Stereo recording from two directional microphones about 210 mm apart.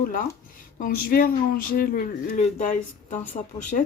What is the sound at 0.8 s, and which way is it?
Speech, 45° left (ahead or behind).